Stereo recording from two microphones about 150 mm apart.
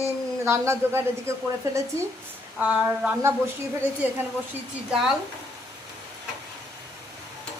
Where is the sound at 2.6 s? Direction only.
10° right (ahead or behind).